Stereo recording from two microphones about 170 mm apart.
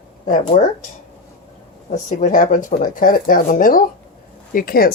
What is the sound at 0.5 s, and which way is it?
Speech, 40° left (ahead or behind).